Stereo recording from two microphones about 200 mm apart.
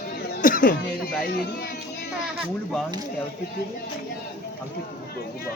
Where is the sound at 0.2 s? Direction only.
45° left (ahead or behind).